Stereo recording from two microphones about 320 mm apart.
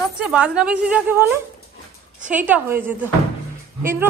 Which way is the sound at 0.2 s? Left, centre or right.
Centre.